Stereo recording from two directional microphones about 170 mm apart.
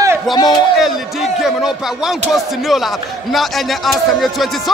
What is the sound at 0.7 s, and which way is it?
Speech, centre (ahead or behind).